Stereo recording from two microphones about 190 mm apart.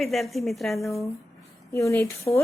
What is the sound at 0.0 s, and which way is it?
A woman's voice, centre (ahead or behind).